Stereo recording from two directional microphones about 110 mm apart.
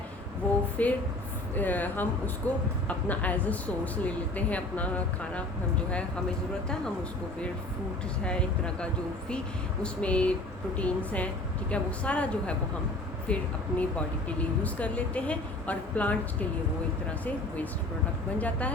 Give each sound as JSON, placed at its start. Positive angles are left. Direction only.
{"t": 0.8, "sound": "speech", "side_deg": 15}
{"t": 8.2, "sound": "speech", "side_deg": 10}
{"t": 18.3, "sound": "speech", "side_deg": 15}